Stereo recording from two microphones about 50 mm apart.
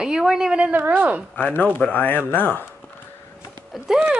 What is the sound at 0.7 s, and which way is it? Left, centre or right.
Speech, right.